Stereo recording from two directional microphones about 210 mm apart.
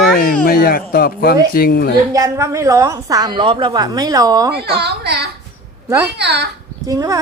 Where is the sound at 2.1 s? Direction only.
15° right (ahead or behind).